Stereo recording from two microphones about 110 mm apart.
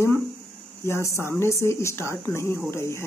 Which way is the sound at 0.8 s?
25° left (ahead or behind).